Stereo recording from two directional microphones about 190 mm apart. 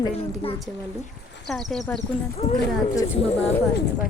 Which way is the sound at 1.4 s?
Centre (ahead or behind).